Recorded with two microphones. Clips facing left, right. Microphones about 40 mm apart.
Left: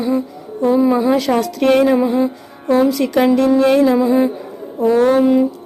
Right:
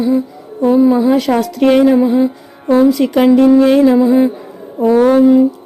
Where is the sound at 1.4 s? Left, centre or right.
Centre.